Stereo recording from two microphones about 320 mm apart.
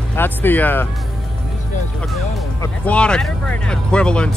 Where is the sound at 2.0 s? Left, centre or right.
Centre.